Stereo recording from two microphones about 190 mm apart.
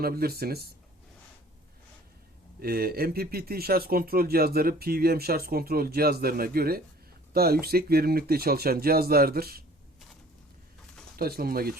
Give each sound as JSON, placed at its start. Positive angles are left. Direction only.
{"t": 0.0, "sound": "speech", "side_deg": -55}
{"t": 2.6, "sound": "speech", "side_deg": -55}
{"t": 11.2, "sound": "speech", "side_deg": -55}